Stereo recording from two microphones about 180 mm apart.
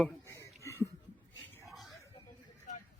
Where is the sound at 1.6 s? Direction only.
Centre (ahead or behind).